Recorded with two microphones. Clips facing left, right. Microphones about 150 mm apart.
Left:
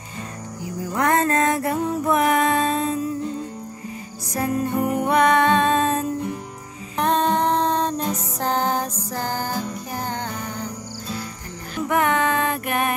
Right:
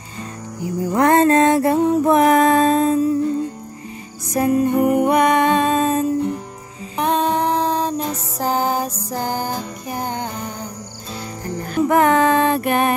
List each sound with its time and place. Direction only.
0.9 s music: 30° right (ahead or behind)
4.3 s music: 15° right (ahead or behind)
11.7 s music: 35° right (ahead or behind)